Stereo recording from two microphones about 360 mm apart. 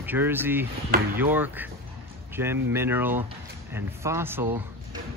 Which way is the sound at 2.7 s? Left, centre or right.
Centre.